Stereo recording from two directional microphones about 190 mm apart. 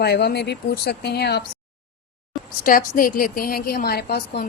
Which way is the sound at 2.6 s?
45° left (ahead or behind).